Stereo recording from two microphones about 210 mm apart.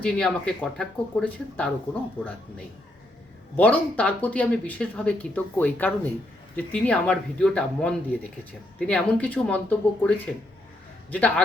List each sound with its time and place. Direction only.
0.0 s speech: 5° left (ahead or behind)
3.6 s speech: 5° left (ahead or behind)